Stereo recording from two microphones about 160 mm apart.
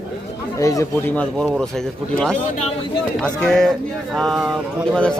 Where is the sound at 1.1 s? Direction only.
10° left (ahead or behind).